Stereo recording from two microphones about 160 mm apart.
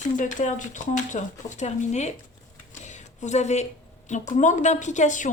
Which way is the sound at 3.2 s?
45° left (ahead or behind).